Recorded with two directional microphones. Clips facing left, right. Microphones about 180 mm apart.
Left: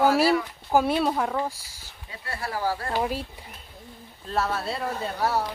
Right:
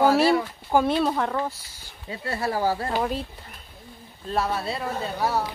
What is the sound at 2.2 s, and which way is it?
Speech, 25° right (ahead or behind).